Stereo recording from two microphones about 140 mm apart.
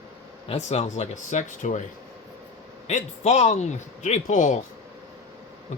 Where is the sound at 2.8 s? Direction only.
55° left (ahead or behind).